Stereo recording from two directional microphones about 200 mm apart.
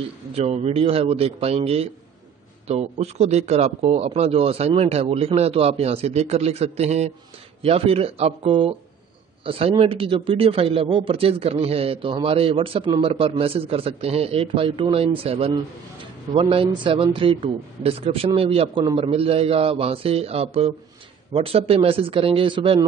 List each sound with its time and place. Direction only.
0.3 s a man's voice: 30° right (ahead or behind)